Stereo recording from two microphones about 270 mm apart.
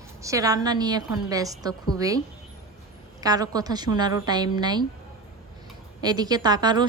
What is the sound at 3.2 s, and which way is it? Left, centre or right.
A woman's voice, centre.